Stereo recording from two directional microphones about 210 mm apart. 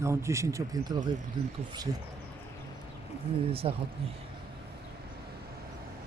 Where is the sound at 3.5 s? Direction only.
25° right (ahead or behind).